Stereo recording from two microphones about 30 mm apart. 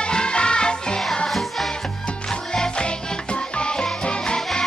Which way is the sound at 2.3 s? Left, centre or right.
Left.